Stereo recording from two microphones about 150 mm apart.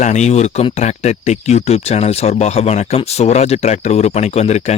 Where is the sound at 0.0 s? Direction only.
50° left (ahead or behind).